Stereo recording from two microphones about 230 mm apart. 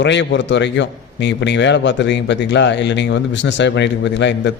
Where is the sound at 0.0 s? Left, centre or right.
Left.